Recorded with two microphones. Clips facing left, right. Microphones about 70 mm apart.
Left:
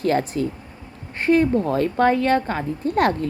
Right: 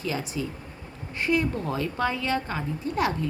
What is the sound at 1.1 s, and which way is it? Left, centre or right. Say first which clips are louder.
A woman's voice: left 8 dB; left.